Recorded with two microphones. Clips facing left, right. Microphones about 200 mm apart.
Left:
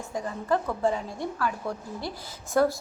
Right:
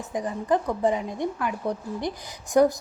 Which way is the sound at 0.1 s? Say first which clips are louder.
Right 3 dB; 20° right (ahead or behind).